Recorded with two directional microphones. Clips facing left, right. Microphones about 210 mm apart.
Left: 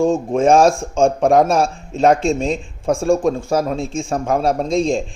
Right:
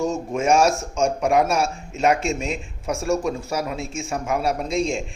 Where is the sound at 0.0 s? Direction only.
30° left (ahead or behind).